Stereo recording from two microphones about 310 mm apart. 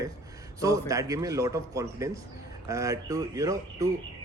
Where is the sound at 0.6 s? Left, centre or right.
Centre.